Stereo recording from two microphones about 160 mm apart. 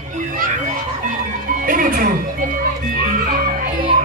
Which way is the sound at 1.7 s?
60° right (ahead or behind).